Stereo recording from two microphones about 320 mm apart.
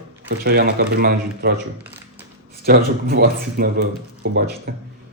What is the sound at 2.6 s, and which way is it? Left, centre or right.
A man's voice, right.